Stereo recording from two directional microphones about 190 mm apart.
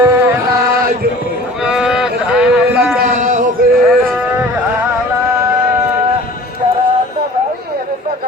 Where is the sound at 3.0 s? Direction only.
40° right (ahead or behind).